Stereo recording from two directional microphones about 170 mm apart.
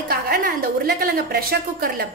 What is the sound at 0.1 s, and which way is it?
A woman's voice, 60° right (ahead or behind).